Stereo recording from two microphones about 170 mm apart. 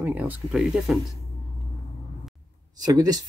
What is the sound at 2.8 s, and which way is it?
Speech, 20° right (ahead or behind).